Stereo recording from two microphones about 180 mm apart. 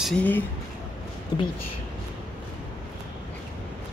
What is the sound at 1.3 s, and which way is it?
Speech, 25° left (ahead or behind).